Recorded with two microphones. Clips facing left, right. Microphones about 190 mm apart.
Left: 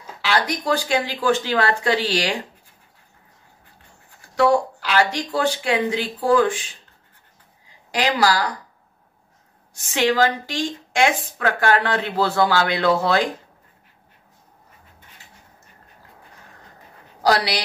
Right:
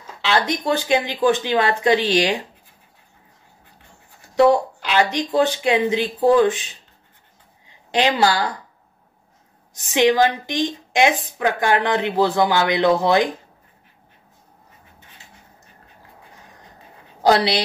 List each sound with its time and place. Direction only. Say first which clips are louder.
0.2 s speech: right 2 dB; 25° right (ahead or behind)
4.4 s speech: right 3 dB; 20° right (ahead or behind)
7.9 s speech: right 2 dB; 25° right (ahead or behind)
9.8 s a woman's voice: right 3 dB; 15° right (ahead or behind)
17.2 s a woman's voice: right 3 dB; 25° right (ahead or behind)